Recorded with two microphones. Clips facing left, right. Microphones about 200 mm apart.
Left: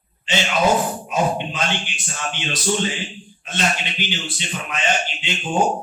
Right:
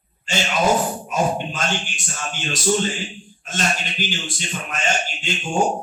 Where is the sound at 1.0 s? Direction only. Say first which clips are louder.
Even; 45° right (ahead or behind).